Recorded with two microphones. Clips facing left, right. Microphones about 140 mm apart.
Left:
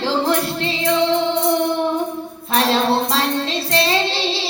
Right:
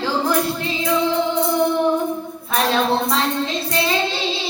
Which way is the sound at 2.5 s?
75° left (ahead or behind).